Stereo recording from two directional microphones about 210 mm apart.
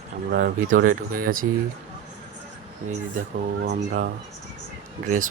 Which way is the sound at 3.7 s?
45° right (ahead or behind).